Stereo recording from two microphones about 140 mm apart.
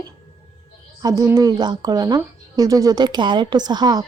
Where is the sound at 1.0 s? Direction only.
25° right (ahead or behind).